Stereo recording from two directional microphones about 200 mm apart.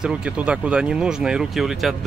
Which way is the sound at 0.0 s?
5° right (ahead or behind).